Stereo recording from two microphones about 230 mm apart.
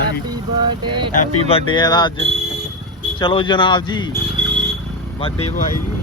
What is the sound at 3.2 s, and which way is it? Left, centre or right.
Speech, left.